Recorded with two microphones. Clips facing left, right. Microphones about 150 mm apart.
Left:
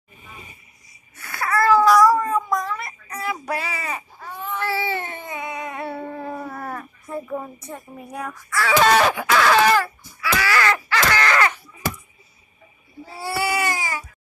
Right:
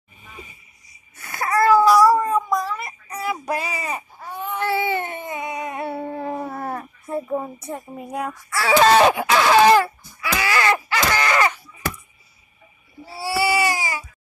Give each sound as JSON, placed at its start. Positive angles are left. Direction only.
{"t": 1.2, "sound": "cat", "side_deg": -20}
{"t": 7.6, "sound": "speech", "side_deg": -30}
{"t": 9.1, "sound": "a sound", "side_deg": -20}
{"t": 13.1, "sound": "baby cry", "side_deg": -10}